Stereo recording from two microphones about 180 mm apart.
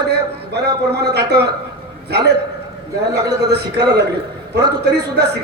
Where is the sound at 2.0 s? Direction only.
65° right (ahead or behind).